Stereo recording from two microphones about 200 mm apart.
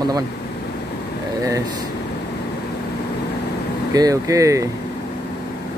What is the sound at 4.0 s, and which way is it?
Speech, 15° right (ahead or behind).